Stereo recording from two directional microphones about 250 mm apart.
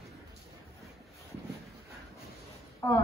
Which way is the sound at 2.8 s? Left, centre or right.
Centre.